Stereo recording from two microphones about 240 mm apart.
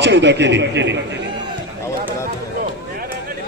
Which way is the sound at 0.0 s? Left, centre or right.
Right.